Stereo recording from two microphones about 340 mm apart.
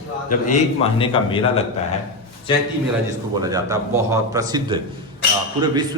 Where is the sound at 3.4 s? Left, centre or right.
Centre.